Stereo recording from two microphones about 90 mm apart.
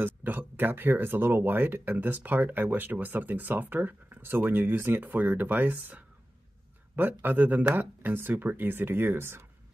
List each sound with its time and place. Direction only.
0.0 s speech: 20° right (ahead or behind)